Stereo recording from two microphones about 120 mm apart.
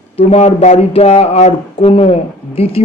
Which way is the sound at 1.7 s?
50° left (ahead or behind).